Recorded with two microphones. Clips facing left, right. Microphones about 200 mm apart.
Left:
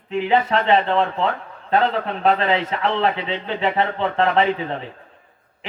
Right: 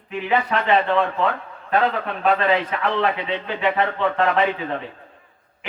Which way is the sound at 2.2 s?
30° left (ahead or behind).